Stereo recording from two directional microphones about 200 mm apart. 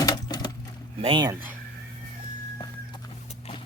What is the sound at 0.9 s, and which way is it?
Speech, 25° right (ahead or behind).